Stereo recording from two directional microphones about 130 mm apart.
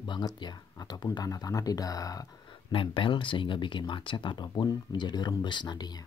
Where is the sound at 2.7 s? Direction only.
40° left (ahead or behind).